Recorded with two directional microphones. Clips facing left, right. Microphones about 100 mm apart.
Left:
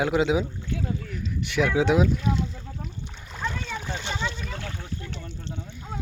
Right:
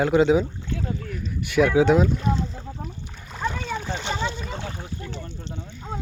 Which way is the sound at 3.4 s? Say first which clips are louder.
Right 4 dB; 10° right (ahead or behind).